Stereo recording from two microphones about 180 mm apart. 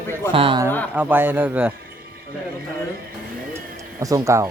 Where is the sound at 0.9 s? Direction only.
10° right (ahead or behind).